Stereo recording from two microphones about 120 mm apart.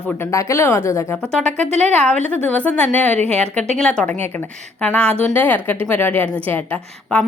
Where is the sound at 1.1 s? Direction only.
5° left (ahead or behind).